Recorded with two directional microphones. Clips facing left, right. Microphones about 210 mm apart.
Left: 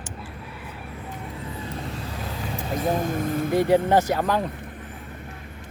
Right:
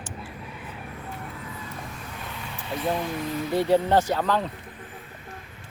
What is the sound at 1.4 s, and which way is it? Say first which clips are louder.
Vehicle: left 5 dB; 30° left (ahead or behind).